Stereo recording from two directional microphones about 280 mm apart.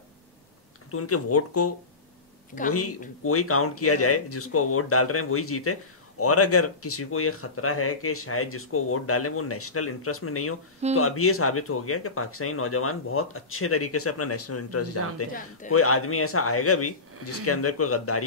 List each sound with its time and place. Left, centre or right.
0.9 s speech: left
2.7 s speech: left